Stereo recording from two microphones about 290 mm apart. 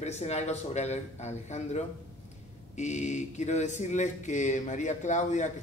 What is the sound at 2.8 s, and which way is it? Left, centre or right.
Speech, left.